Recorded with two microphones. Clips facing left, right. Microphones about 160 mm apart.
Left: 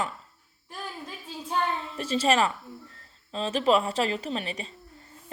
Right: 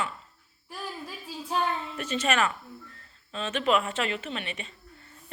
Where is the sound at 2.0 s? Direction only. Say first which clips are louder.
Left 4 dB; 30° left (ahead or behind).